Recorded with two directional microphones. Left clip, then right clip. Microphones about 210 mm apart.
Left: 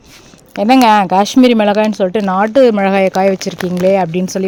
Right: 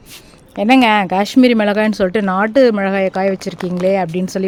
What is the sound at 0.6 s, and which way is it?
Speech, 10° left (ahead or behind).